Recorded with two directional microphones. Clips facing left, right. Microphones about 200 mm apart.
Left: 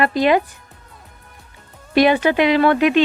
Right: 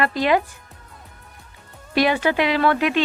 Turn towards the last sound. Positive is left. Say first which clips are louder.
# left 5 dB
turn(degrees=20)  # may be behind; listen again after turning